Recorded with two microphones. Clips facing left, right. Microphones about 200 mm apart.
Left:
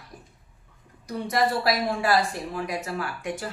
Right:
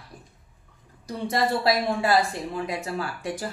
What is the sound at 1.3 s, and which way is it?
Speech, 25° right (ahead or behind).